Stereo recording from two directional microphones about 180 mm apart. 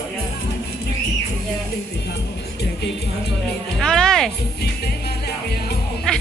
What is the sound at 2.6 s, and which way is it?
Music, 65° left (ahead or behind).